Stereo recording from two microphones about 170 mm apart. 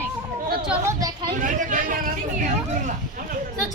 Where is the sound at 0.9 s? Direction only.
25° right (ahead or behind).